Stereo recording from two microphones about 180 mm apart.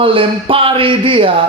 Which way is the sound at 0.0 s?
30° right (ahead or behind).